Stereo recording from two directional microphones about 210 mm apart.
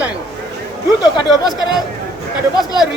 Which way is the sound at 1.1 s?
20° left (ahead or behind).